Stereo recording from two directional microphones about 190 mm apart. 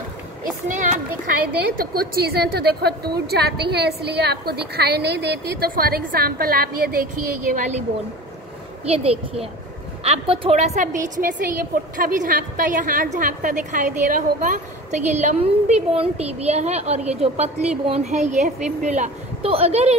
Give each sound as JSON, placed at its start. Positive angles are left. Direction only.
{"t": 0.4, "sound": "a sound", "side_deg": -40}
{"t": 1.8, "sound": "a woman's voice", "side_deg": -55}
{"t": 7.5, "sound": "a woman's voice", "side_deg": -40}
{"t": 8.8, "sound": "a woman's voice", "side_deg": -30}